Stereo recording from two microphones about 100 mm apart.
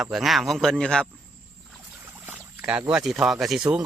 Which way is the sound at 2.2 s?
15° right (ahead or behind).